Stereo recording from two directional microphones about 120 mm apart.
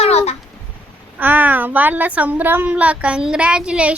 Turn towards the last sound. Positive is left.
turn(degrees=-10)  # may be behind; listen again after turning